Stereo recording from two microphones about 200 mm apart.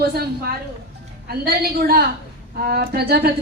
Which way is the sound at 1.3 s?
50° right (ahead or behind).